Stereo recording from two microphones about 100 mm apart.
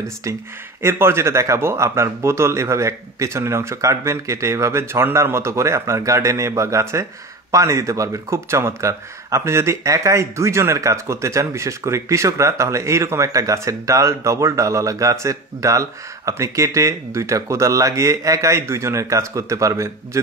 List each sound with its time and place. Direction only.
0.8 s a man's voice: 25° right (ahead or behind)